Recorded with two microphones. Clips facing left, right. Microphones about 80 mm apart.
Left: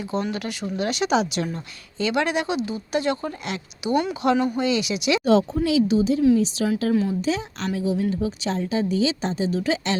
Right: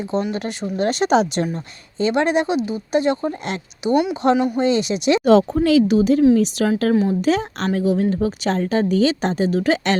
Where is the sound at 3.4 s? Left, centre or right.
Right.